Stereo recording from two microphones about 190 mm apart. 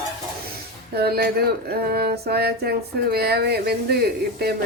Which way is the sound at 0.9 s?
55° right (ahead or behind).